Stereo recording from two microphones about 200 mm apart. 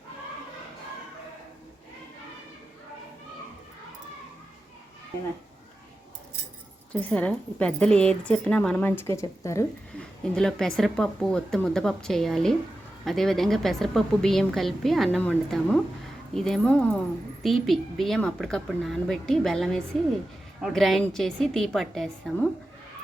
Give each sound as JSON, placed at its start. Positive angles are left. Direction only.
{"t": 7.0, "sound": "a woman's voice", "side_deg": 5}
{"t": 10.3, "sound": "a woman's voice", "side_deg": 5}